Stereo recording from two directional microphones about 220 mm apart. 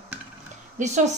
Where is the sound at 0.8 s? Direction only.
35° right (ahead or behind).